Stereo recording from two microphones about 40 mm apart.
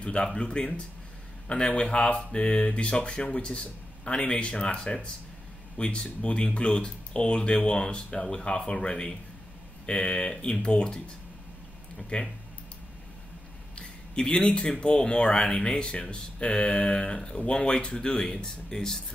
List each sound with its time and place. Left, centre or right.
0.0 s speech: left
12.1 s speech: left
13.7 s a sound: left
14.7 s speech: left